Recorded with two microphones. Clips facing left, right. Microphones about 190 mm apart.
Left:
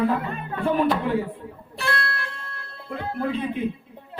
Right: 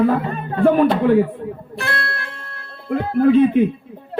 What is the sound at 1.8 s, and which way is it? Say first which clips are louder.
Music: right 1 dB; 55° right (ahead or behind).